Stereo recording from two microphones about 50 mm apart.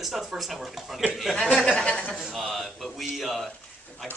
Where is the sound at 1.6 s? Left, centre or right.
Centre.